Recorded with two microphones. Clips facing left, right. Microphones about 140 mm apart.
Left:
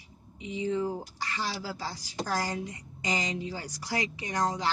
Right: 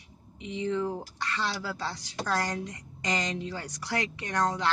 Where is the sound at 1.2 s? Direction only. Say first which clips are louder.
Right 4 dB; 65° right (ahead or behind).